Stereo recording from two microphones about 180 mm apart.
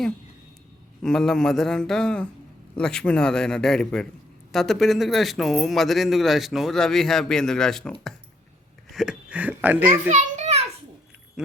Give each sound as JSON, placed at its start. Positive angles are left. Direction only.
{"t": 1.0, "sound": "a man's voice", "side_deg": 5}
{"t": 10.1, "sound": "children playing", "side_deg": -40}